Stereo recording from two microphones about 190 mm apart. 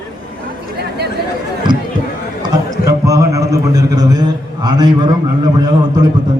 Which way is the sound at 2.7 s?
15° right (ahead or behind).